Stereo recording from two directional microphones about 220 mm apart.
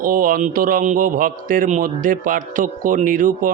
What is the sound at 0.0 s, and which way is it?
Mantra, 40° right (ahead or behind).